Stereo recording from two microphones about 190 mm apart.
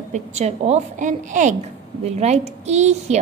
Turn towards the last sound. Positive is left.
turn(degrees=-35)  # may be behind; listen again after turning